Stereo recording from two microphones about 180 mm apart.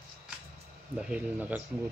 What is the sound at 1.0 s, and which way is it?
Speech, 5° right (ahead or behind).